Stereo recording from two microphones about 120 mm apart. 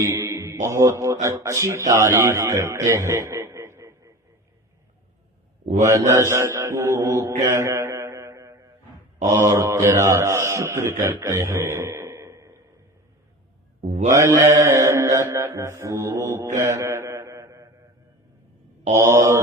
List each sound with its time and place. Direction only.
0.0 s speech: 25° right (ahead or behind)
5.8 s speech: 25° right (ahead or behind)
7.4 s a sound: 25° right (ahead or behind)
9.2 s mantra: 25° right (ahead or behind)
14.1 s mantra: 25° right (ahead or behind)
19.0 s speech: 25° right (ahead or behind)